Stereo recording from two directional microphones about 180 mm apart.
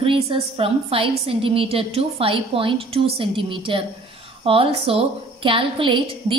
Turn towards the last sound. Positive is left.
turn(degrees=-30)  # may be behind; listen again after turning